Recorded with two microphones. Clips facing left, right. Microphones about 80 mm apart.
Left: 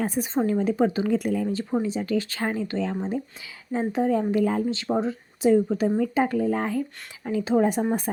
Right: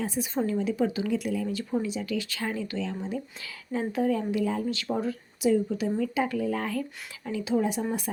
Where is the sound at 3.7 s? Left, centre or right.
Left.